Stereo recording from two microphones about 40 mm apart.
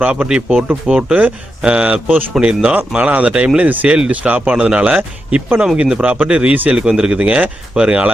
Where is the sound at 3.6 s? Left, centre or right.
Right.